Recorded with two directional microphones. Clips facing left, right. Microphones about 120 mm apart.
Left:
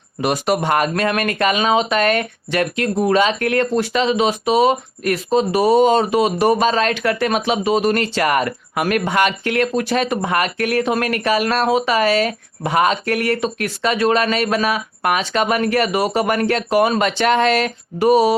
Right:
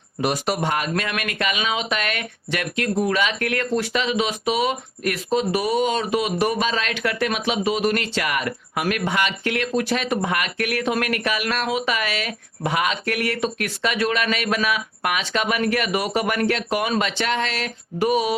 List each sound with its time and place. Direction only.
0.2 s speech: 65° left (ahead or behind)
0.9 s speech: 40° left (ahead or behind)
18.1 s speech: 35° left (ahead or behind)